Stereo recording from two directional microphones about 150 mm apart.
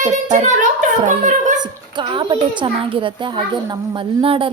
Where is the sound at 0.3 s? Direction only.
55° right (ahead or behind).